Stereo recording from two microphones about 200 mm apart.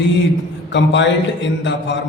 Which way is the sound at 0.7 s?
65° left (ahead or behind).